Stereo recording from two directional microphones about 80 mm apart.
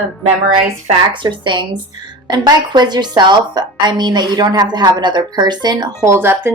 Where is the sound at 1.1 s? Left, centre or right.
Right.